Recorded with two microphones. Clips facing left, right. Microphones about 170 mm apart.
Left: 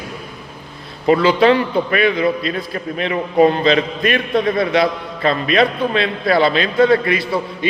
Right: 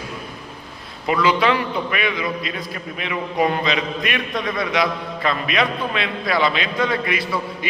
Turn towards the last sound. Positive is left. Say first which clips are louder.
# left 7 dB
turn(degrees=30)  # may be behind; listen again after turning